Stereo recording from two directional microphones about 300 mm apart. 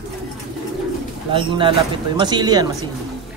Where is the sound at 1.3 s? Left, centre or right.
Centre.